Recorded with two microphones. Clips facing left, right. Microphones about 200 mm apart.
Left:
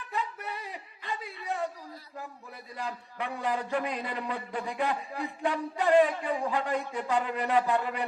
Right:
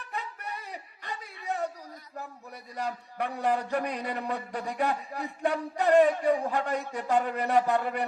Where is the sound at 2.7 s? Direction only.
40° right (ahead or behind).